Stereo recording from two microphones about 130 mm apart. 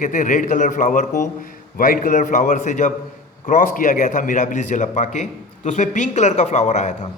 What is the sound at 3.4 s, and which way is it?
A man's voice, 90° left.